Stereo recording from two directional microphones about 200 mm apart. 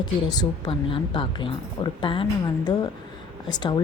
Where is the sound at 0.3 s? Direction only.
25° left (ahead or behind).